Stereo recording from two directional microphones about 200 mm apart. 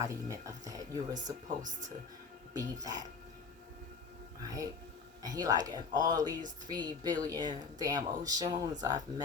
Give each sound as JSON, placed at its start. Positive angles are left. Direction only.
{"t": 0.0, "sound": "speech", "side_deg": -15}
{"t": 1.1, "sound": "speech", "side_deg": -40}
{"t": 2.8, "sound": "speech", "side_deg": -20}
{"t": 4.4, "sound": "speech", "side_deg": -15}